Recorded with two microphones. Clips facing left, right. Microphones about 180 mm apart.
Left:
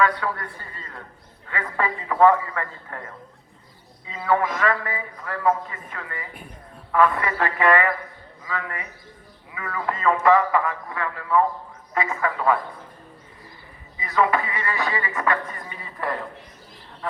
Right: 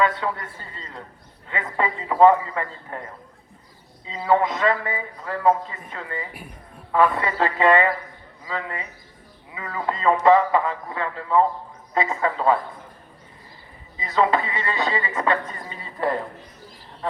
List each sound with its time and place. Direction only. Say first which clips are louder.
0.0 s a man's voice: even; 25° right (ahead or behind)
14.0 s a man's voice: right 1 dB; 25° right (ahead or behind)